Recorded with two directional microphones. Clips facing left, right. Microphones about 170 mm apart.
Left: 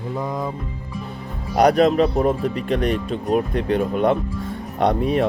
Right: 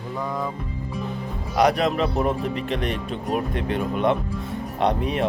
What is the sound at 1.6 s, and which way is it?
Speech, 35° left (ahead or behind).